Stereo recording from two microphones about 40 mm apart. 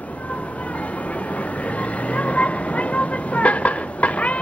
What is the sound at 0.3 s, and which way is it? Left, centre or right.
Vehicle, left.